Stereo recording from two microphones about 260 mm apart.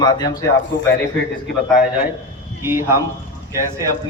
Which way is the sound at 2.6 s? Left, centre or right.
Centre.